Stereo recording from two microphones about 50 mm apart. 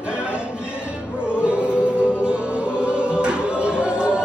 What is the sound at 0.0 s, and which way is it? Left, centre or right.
Music, right.